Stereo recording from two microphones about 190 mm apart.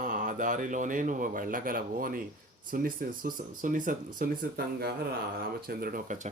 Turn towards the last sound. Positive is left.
turn(degrees=-50)  # may be behind; listen again after turning